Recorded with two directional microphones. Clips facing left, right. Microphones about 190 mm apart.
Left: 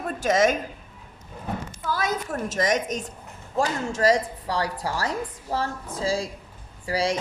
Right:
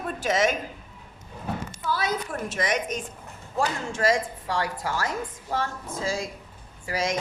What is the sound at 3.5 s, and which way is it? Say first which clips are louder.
A woman's voice: left 2 dB; 40° left (ahead or behind).